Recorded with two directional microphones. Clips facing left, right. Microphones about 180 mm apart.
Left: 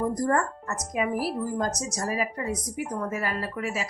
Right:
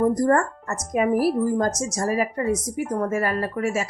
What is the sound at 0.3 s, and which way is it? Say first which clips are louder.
A woman's voice: right 5 dB; 50° right (ahead or behind).